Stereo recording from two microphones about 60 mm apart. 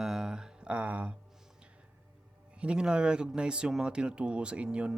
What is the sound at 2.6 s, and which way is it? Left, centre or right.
Speech, centre.